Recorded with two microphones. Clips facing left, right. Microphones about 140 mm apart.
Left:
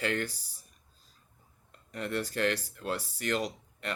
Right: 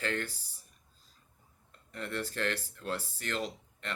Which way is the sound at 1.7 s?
15° left (ahead or behind).